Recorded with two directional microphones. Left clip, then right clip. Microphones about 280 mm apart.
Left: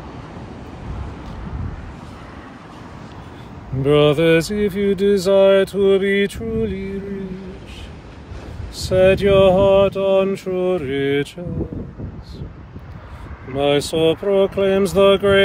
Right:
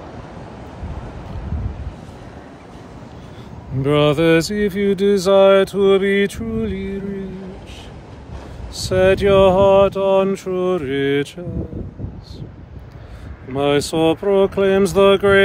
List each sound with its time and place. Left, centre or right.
3.8 s speech: centre
8.8 s speech: centre
13.6 s speech: centre